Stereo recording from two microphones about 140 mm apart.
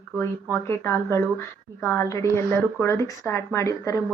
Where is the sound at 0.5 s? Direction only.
20° left (ahead or behind).